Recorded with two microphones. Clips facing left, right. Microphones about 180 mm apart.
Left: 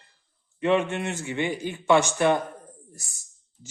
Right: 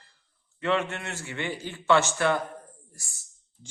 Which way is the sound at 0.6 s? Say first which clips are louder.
Left 4 dB; 20° left (ahead or behind).